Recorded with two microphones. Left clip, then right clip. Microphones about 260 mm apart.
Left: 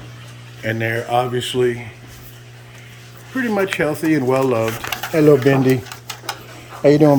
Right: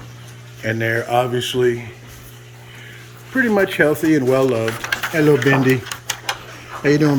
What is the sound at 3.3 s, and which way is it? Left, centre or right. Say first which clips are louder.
Speech: right 3 dB; centre.